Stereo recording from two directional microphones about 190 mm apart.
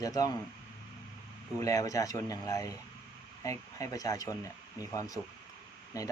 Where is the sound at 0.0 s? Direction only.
20° left (ahead or behind).